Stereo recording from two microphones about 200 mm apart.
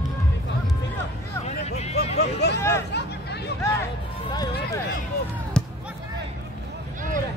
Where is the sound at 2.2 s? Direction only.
55° left (ahead or behind).